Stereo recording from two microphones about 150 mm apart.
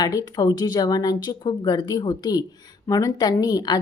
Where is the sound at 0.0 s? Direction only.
25° left (ahead or behind).